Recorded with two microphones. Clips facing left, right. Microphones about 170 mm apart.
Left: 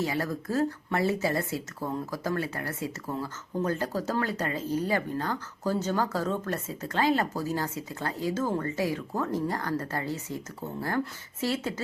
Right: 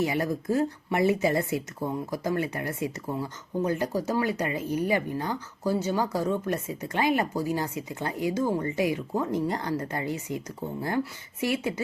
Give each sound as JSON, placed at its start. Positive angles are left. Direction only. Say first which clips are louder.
{"t": 0.0, "sound": "speech", "louder": "right 3 dB", "side_deg": -20}